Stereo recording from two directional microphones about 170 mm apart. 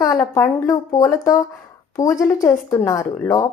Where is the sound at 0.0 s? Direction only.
20° left (ahead or behind).